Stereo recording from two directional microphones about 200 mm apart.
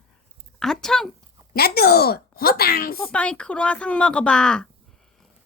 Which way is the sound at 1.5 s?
50° left (ahead or behind).